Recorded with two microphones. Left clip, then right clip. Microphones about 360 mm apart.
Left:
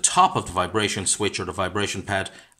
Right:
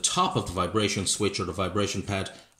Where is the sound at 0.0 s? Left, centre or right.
Centre.